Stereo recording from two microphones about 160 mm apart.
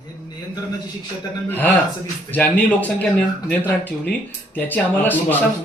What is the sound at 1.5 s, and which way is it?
Speech, 10° left (ahead or behind).